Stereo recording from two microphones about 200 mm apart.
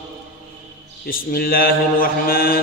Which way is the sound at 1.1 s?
45° left (ahead or behind).